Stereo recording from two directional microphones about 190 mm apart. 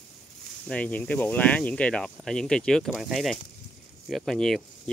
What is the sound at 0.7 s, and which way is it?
Speech, 5° left (ahead or behind).